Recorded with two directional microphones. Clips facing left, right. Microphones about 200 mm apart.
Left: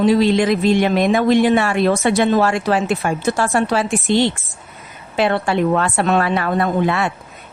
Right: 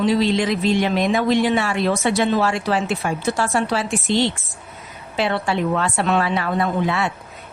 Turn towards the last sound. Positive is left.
turn(degrees=50)  # may be behind; listen again after turning